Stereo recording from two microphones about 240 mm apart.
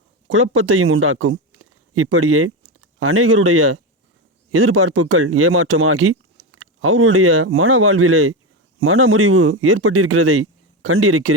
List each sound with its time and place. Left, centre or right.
0.3 s speech: right